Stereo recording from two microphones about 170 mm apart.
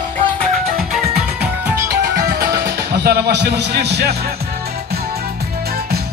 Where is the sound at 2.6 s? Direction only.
70° right (ahead or behind).